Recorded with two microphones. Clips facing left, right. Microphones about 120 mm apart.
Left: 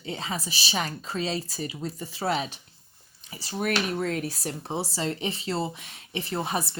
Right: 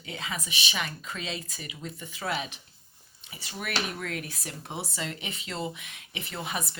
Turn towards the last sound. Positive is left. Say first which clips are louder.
# left 6 dB
turn(degrees=35)  # may be behind; listen again after turning